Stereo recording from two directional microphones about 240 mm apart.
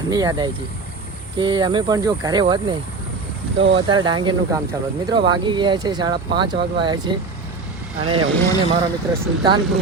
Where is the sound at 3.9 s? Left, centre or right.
Centre.